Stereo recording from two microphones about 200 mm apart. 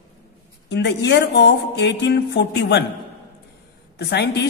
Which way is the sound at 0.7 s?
60° left (ahead or behind).